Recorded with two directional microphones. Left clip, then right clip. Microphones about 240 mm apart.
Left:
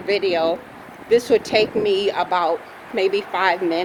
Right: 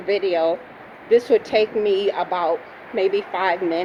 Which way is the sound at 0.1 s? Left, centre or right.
Centre.